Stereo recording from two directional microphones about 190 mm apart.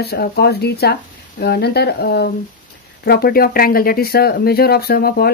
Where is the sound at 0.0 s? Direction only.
55° left (ahead or behind).